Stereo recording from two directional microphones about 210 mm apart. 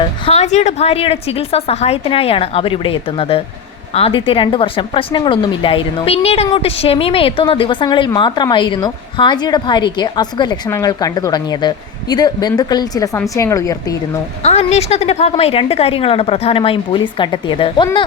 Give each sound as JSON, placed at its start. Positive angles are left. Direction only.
{"t": 0.3, "sound": "speech", "side_deg": 30}
{"t": 14.4, "sound": "speech", "side_deg": 30}